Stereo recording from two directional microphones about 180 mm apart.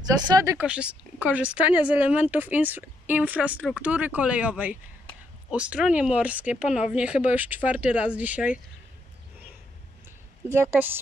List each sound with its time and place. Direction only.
0.0 s speech: 20° right (ahead or behind)
0.7 s speech: 5° right (ahead or behind)
10.5 s speech: 15° right (ahead or behind)